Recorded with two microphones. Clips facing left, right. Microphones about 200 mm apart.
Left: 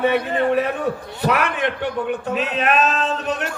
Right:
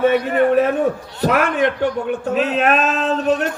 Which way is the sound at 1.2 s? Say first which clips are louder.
Right 4 dB; 45° right (ahead or behind).